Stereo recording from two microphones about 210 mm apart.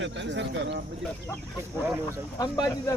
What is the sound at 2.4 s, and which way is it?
Speech, 15° left (ahead or behind).